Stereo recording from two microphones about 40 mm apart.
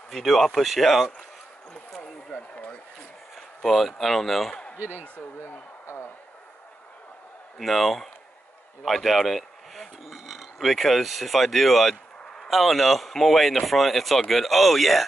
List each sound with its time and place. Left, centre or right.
0.1 s speech: centre
2.2 s speech: left
3.3 s speech: centre
4.7 s speech: right
5.4 s a sound: left
7.5 s speech: centre
9.3 s a sound: centre
10.6 s speech: centre